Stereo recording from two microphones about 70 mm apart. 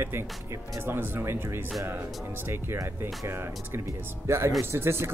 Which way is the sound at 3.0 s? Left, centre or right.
Right.